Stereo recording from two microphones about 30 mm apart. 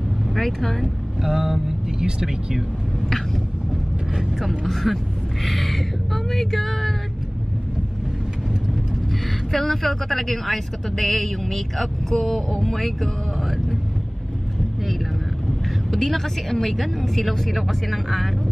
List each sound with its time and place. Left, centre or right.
0.3 s speech: centre
1.2 s speech: centre
4.1 s speech: centre
4.4 s speech: centre
9.5 s a woman's voice: centre
15.9 s speech: centre